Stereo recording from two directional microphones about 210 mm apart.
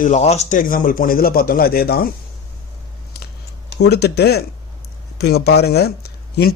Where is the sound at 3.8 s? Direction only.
50° left (ahead or behind).